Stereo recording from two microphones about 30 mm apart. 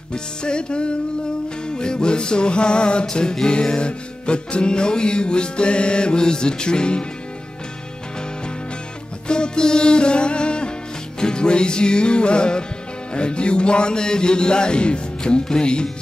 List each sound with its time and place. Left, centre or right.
0.1 s music: left
9.3 s music: left